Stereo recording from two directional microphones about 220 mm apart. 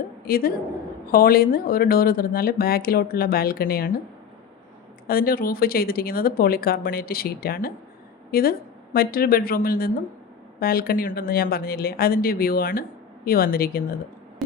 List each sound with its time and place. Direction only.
0.3 s a woman's voice: 40° left (ahead or behind)
5.0 s speech: 40° left (ahead or behind)